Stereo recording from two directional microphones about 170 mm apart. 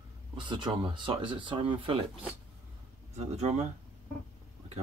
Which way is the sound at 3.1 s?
40° right (ahead or behind).